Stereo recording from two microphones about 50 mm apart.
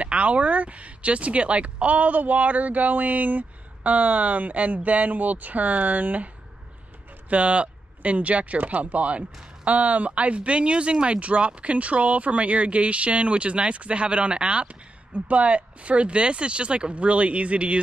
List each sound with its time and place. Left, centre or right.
0.0 s speech: right